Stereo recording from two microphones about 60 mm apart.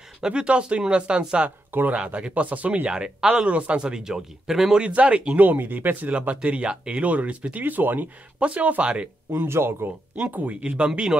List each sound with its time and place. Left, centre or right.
0.2 s speech: centre
1.7 s speech: right
2.0 s speech: centre
2.9 s speech: centre
5.4 s speech: right
7.6 s speech: right
9.5 s a man's voice: right
10.1 s speech: right